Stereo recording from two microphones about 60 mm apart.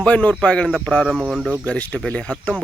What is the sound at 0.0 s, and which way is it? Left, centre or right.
Speech, left.